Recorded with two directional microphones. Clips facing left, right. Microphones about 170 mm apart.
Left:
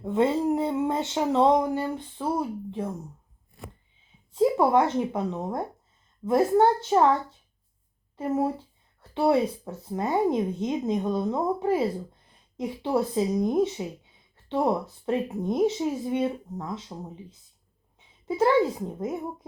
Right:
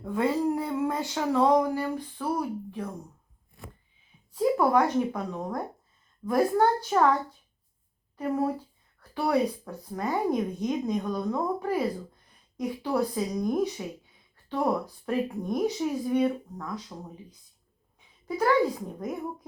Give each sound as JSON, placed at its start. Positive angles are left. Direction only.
{"t": 0.0, "sound": "speech", "side_deg": 25}
{"t": 4.3, "sound": "speech", "side_deg": 25}
{"t": 18.3, "sound": "speech", "side_deg": 25}